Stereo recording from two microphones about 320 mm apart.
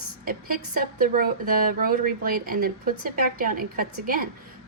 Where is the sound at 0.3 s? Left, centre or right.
Right.